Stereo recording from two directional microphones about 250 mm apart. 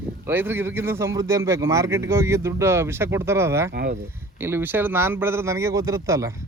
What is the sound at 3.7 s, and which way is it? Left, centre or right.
Speech, right.